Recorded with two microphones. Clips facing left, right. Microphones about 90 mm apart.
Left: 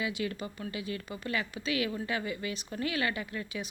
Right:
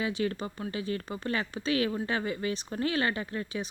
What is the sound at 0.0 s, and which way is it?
Speech, 35° right (ahead or behind).